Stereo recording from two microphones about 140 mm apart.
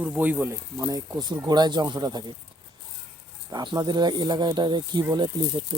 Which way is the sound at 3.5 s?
30° right (ahead or behind).